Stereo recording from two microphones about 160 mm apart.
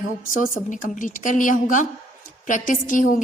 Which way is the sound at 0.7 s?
55° left (ahead or behind).